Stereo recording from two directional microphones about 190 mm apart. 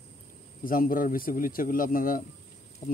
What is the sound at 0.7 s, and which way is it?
Speech, 50° left (ahead or behind).